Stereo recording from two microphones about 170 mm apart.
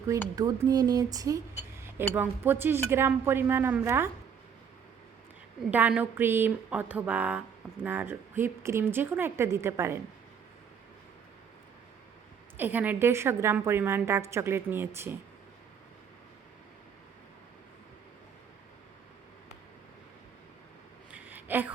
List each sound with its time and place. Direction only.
0.1 s speech: 20° right (ahead or behind)
2.1 s speech: 10° right (ahead or behind)
5.7 s speech: 10° right (ahead or behind)
12.5 s speech: 10° right (ahead or behind)
21.1 s a sound: 10° right (ahead or behind)